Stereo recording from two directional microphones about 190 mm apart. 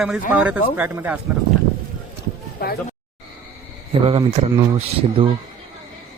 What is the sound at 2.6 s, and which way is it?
Speech, 50° left (ahead or behind).